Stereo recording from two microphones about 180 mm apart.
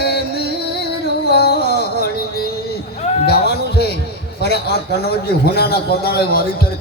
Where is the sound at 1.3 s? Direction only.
60° left (ahead or behind).